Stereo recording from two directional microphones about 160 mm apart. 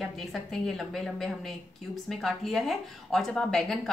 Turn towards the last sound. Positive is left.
turn(degrees=5)  # may be behind; listen again after turning